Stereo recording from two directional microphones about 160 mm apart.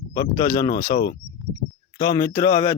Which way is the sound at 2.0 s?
20° left (ahead or behind).